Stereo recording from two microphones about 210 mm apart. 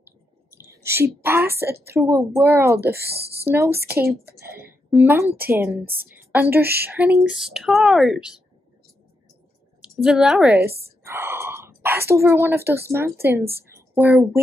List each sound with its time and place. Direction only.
0.5 s a woman's voice: 10° right (ahead or behind)
3.0 s speech: 50° right (ahead or behind)
3.4 s a woman's voice: 10° right (ahead or behind)
9.8 s a woman's voice: 5° right (ahead or behind)